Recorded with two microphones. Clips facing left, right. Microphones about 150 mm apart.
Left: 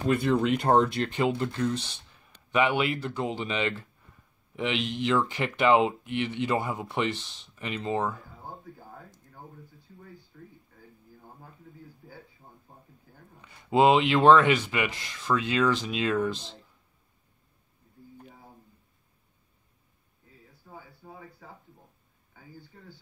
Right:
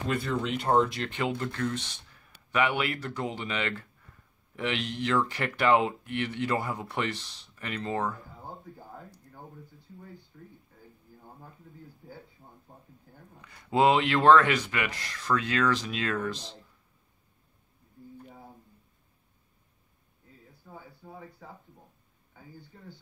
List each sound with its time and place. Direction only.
0.6 s speech: 45° left (ahead or behind)
0.9 s speech: 25° left (ahead or behind)
13.7 s speech: 20° left (ahead or behind)